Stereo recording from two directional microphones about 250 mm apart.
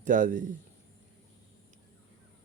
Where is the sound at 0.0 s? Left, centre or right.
Right.